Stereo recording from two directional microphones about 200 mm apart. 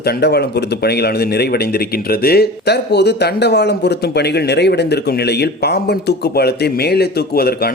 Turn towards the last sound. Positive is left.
turn(degrees=50)  # may be behind; listen again after turning